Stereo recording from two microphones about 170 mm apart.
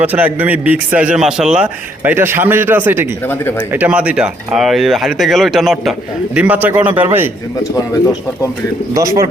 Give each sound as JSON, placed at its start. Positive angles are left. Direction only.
{"t": 0.0, "sound": "a man's voice", "side_deg": -10}
{"t": 9.0, "sound": "a man's voice", "side_deg": -20}